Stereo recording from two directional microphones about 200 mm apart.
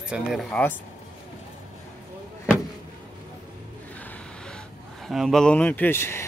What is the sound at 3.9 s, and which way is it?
Speech, 10° left (ahead or behind).